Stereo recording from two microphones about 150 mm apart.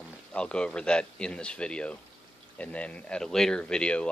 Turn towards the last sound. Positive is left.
turn(degrees=5)  # may be behind; listen again after turning